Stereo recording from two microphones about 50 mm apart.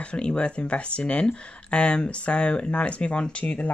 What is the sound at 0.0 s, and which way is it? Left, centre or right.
Speech, left.